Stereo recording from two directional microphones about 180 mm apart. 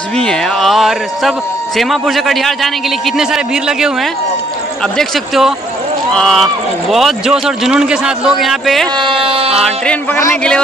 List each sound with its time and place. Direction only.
0.2 s a man's voice: 5° left (ahead or behind)
8.9 s speech: 30° right (ahead or behind)
10.1 s speech: 10° left (ahead or behind)